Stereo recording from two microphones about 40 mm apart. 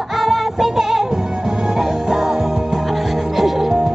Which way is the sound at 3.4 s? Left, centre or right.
Centre.